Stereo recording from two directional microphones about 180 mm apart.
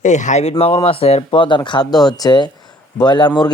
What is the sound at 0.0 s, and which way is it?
Speech, 40° left (ahead or behind).